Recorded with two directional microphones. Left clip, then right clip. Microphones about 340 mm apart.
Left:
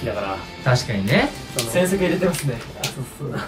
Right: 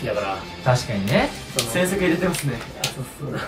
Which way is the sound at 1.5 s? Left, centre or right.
Centre.